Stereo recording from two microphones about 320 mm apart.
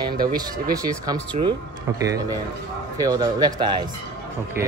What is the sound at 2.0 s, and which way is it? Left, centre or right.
A man's voice, centre.